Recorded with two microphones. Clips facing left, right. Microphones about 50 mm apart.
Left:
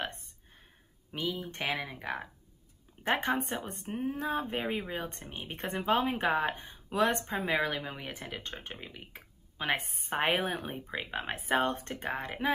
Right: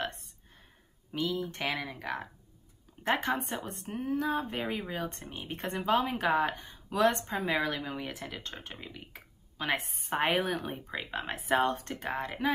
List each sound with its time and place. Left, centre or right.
1.1 s speech: left
3.1 s speech: left
10.1 s speech: left; by 11.3 s centre
11.4 s speech: left